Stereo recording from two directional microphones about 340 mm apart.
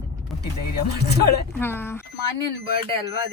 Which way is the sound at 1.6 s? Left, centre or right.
Centre.